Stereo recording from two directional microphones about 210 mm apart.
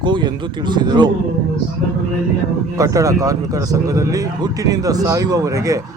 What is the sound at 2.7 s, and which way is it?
Speech, 15° right (ahead or behind).